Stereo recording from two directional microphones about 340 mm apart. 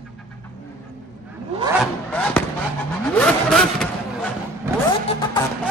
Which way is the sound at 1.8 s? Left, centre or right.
Centre.